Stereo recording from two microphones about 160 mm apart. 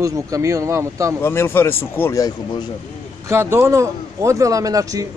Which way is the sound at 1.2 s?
15° left (ahead or behind).